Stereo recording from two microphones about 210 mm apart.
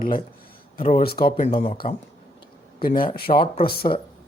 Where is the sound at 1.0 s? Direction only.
45° left (ahead or behind).